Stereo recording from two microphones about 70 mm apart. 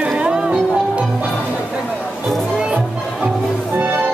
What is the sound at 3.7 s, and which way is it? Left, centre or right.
Music, right.